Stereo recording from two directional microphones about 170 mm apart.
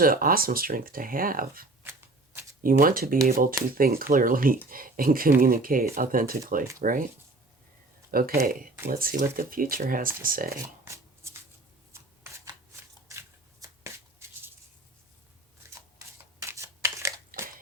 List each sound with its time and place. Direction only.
0.0 s speech: 60° right (ahead or behind)
1.8 s shuffling cards: 10° right (ahead or behind)
2.6 s speech: 55° right (ahead or behind)
8.1 s speech: 60° right (ahead or behind)
10.8 s shuffling cards: 15° right (ahead or behind)
16.4 s scissors: 20° right (ahead or behind)